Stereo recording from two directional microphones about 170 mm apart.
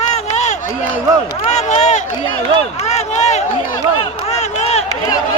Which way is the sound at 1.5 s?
45° left (ahead or behind).